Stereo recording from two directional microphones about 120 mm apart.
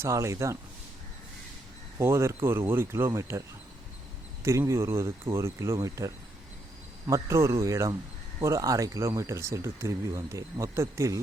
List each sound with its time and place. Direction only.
0.0 s speech: 25° right (ahead or behind)
2.0 s speech: 25° right (ahead or behind)
4.4 s speech: 25° right (ahead or behind)